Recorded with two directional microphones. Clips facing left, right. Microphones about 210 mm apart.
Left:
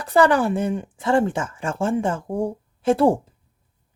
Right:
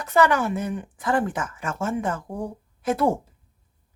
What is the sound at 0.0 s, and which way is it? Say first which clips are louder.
Speech: left 3 dB; 35° left (ahead or behind).